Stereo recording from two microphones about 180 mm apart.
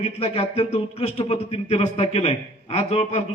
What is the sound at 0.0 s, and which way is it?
A man's voice, 35° left (ahead or behind).